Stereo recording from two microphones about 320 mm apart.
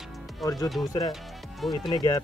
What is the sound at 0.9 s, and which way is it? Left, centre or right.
Speech, centre.